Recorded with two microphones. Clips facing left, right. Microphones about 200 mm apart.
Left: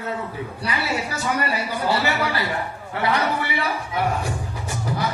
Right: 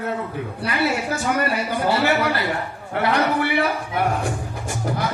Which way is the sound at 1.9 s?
55° right (ahead or behind).